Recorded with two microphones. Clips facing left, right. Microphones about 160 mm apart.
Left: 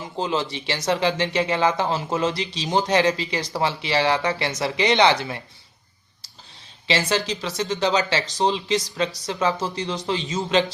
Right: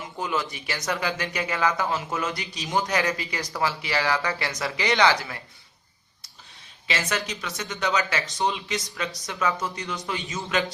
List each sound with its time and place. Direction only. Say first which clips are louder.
0.0 s a sound: left 4 dB; 25° left (ahead or behind)
0.5 s speech: left 6 dB; 25° left (ahead or behind)
6.8 s speech: left 6 dB; 30° left (ahead or behind)